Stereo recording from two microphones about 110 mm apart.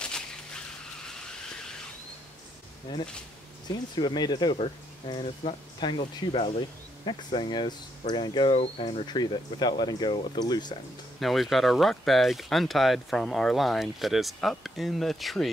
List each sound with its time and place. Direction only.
2.9 s speech: 40° left (ahead or behind)
4.6 s speech: 50° left (ahead or behind)
8.5 s speech: 60° left (ahead or behind)
9.0 s speech: 40° left (ahead or behind)
11.1 s speech: centre (ahead or behind)